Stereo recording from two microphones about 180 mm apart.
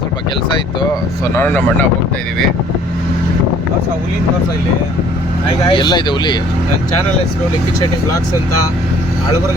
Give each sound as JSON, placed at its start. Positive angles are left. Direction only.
{"t": 1.4, "sound": "speech", "side_deg": 10}
{"t": 5.6, "sound": "speech", "side_deg": 25}